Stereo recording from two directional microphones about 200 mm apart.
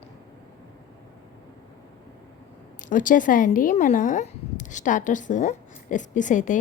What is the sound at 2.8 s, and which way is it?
Speech, 40° left (ahead or behind).